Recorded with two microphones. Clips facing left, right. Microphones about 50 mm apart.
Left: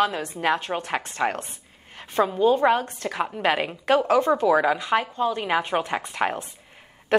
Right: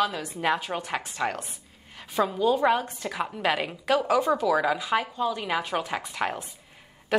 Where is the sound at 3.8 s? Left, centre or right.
Left.